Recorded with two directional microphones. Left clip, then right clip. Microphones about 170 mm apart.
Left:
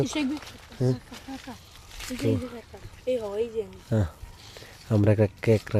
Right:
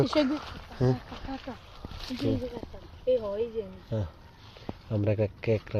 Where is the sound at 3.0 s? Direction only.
65° left (ahead or behind).